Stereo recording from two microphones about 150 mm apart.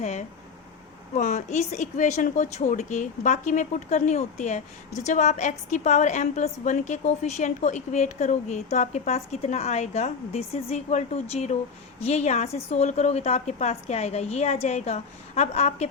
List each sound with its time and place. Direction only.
0.0 s speech: 50° left (ahead or behind)